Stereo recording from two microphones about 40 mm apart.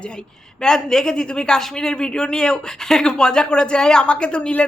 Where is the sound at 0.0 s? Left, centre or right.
Left.